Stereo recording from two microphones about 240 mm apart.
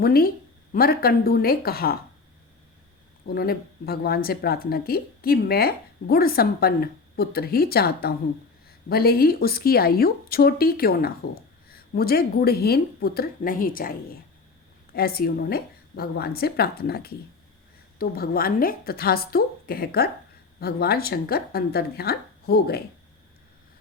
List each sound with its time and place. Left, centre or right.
0.0 s speech: left
3.2 s speech: left